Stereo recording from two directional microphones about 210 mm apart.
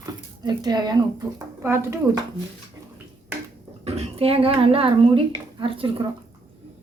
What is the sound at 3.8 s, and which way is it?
Speech, 30° right (ahead or behind).